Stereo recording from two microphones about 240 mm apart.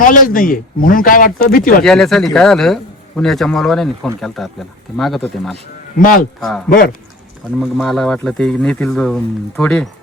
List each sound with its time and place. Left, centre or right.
0.0 s speech: left
1.8 s a man's voice: centre
6.0 s speech: left
7.6 s a man's voice: centre